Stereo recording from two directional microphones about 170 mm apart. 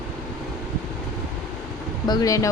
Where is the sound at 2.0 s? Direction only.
20° left (ahead or behind).